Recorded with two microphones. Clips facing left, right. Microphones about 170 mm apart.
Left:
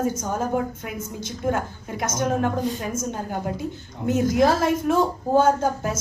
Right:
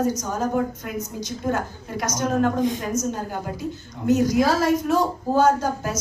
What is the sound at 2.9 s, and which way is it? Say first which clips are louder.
A woman's voice: right 2 dB; 50° left (ahead or behind).